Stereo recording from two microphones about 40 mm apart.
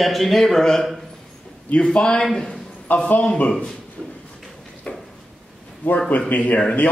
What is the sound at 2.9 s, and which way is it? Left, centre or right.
Speech, left.